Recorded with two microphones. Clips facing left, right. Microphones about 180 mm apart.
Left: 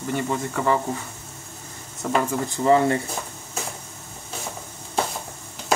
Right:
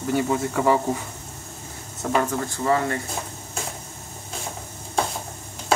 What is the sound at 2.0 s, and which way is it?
Speech, centre (ahead or behind).